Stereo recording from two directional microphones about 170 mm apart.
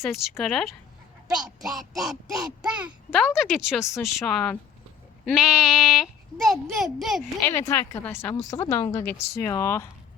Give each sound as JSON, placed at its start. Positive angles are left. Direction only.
{"t": 0.0, "sound": "a child's voice", "side_deg": 0}
{"t": 7.5, "sound": "speech", "side_deg": 20}